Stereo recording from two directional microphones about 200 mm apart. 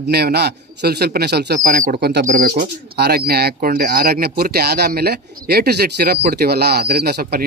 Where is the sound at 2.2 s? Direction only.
40° right (ahead or behind).